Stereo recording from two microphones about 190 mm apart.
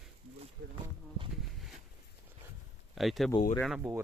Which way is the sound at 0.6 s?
65° right (ahead or behind).